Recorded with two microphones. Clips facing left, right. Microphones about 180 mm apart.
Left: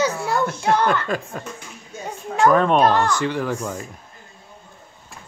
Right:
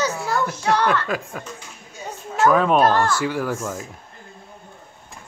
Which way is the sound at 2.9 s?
15° left (ahead or behind).